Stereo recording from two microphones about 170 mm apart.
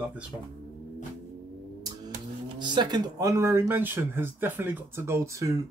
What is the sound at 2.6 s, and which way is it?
Speech, 25° right (ahead or behind).